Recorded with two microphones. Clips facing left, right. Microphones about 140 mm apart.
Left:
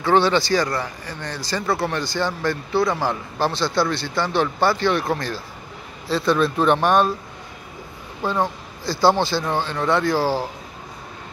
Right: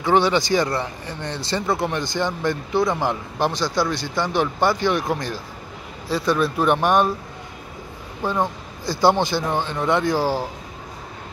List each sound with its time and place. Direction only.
0.0 s speech: 15° right (ahead or behind)
8.2 s speech: 15° right (ahead or behind)